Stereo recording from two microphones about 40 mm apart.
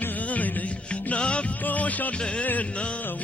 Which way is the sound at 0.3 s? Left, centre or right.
Left.